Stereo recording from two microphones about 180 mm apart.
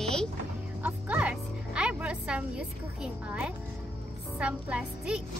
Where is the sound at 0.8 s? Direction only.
10° right (ahead or behind).